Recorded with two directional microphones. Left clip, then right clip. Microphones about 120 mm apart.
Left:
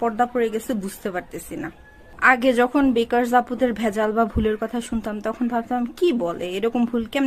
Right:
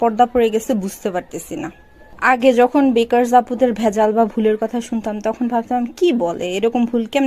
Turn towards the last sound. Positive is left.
turn(degrees=-25)  # may be behind; listen again after turning